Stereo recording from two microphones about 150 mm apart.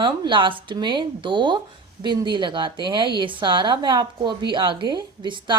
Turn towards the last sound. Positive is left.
turn(degrees=-30)  # may be behind; listen again after turning